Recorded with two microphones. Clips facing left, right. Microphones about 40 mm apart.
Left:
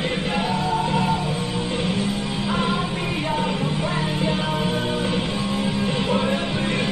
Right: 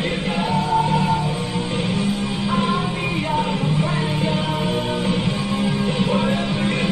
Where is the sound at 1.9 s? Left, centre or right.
Centre.